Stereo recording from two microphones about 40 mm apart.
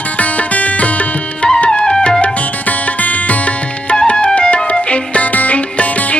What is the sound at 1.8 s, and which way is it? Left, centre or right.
Music, left.